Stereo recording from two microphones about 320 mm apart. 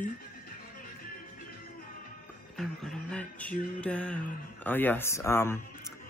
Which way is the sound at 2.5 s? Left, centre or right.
Centre.